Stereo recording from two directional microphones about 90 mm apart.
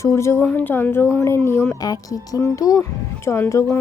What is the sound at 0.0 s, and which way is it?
Speech, 35° left (ahead or behind).